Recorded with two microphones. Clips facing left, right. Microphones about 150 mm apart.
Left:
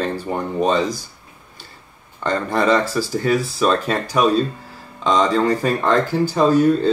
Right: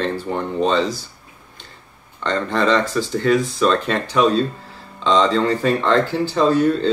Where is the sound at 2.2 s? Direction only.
10° left (ahead or behind).